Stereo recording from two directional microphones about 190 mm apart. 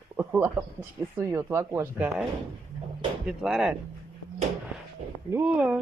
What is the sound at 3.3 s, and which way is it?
Speech, centre (ahead or behind).